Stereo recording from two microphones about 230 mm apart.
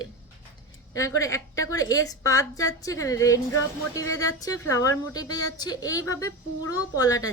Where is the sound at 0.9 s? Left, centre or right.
Centre.